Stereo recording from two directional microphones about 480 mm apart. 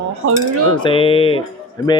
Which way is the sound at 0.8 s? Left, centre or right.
Centre.